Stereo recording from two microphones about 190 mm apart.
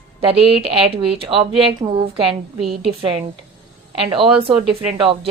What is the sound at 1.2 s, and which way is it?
Speech, 25° right (ahead or behind).